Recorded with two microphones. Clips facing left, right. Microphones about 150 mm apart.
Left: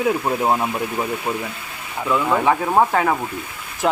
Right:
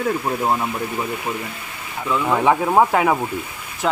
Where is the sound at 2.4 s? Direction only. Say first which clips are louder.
Right 4 dB; 10° right (ahead or behind).